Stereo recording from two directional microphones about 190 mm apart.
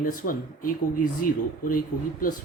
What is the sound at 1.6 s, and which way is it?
Speech, 45° left (ahead or behind).